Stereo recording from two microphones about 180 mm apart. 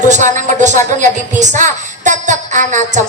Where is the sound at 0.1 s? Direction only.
45° right (ahead or behind).